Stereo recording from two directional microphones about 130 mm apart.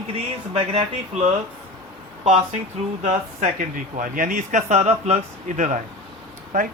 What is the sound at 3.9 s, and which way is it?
Speech, 90° right.